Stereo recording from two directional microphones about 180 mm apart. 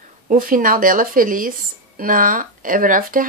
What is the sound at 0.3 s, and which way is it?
Speech, 50° right (ahead or behind).